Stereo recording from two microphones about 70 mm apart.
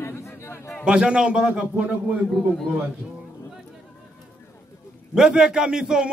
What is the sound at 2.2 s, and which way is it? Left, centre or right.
Speech, centre.